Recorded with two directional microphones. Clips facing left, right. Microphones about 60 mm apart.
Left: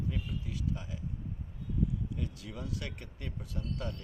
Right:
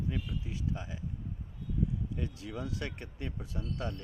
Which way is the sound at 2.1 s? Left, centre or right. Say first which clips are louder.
Right 2 dB; right.